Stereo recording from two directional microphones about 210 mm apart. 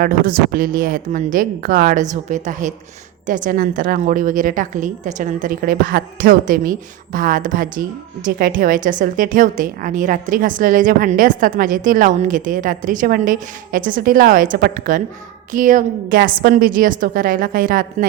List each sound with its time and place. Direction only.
0.0 s a woman's voice: 40° right (ahead or behind)